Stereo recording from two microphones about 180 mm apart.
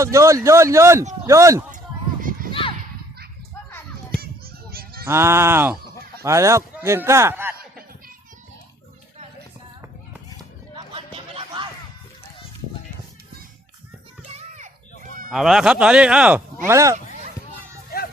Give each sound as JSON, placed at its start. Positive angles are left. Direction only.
{"t": 0.0, "sound": "speech", "side_deg": -15}
{"t": 2.5, "sound": "a sound", "side_deg": 30}
{"t": 3.7, "sound": "children playing", "side_deg": 10}
{"t": 4.7, "sound": "honk", "side_deg": -55}
{"t": 5.0, "sound": "speech", "side_deg": -15}
{"t": 10.3, "sound": "a sound", "side_deg": -25}
{"t": 14.3, "sound": "children playing", "side_deg": -40}
{"t": 15.3, "sound": "speech", "side_deg": 0}
{"t": 16.6, "sound": "speech", "side_deg": -15}